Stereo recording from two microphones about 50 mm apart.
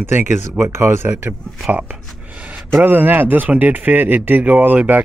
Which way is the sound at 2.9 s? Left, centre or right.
Right.